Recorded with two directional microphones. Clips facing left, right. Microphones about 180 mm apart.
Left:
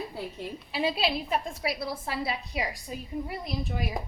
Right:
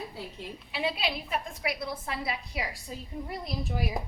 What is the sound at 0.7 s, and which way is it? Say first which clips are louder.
A woman's voice: left 3 dB; 35° left (ahead or behind).